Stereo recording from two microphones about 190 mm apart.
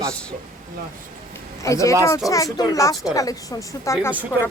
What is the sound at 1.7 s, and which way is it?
A woman's voice, 15° left (ahead or behind).